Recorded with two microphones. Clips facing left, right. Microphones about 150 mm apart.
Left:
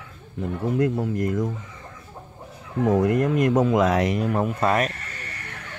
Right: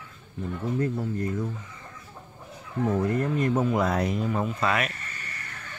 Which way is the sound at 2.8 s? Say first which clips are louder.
Left 5 dB; 85° left.